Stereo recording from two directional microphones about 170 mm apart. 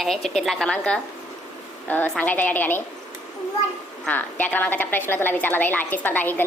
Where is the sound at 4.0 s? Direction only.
10° left (ahead or behind).